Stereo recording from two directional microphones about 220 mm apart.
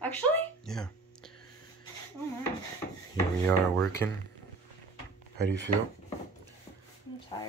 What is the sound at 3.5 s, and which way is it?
Rub, 10° left (ahead or behind).